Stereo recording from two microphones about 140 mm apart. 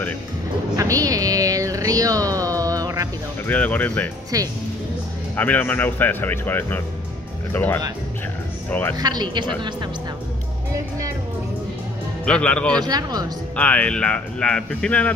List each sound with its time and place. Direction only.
0.7 s a sound: 25° right (ahead or behind)
3.4 s speech: 10° left (ahead or behind)
4.3 s speech: 25° right (ahead or behind)
5.3 s speech: 10° left (ahead or behind)
8.9 s speech: 30° right (ahead or behind)
12.3 s speech: 5° left (ahead or behind)
12.8 s speech: 30° right (ahead or behind)
13.6 s speech: 10° left (ahead or behind)